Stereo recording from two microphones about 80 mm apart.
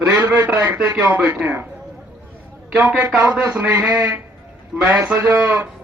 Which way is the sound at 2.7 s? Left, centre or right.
Centre.